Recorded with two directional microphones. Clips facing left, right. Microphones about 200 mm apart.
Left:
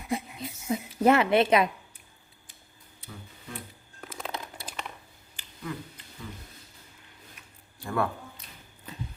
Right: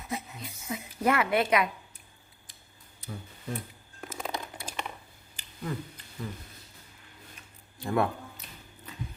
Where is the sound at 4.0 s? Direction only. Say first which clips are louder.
Right 2 dB; 5° right (ahead or behind).